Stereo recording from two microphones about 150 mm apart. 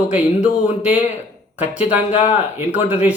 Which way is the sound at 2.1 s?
50° left (ahead or behind).